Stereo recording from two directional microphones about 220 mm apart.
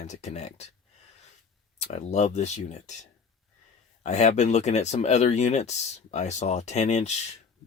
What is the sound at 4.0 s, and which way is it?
Speech, 30° left (ahead or behind).